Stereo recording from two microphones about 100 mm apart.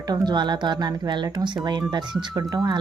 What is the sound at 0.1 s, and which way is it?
Speech, 50° right (ahead or behind).